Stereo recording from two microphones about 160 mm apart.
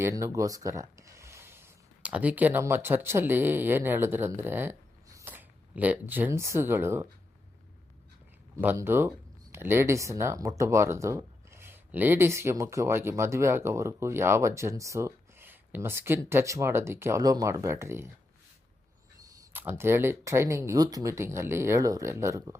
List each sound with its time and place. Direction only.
0.0 s speech: 20° right (ahead or behind)
8.5 s speech: 15° right (ahead or behind)
19.2 s speech: 15° right (ahead or behind)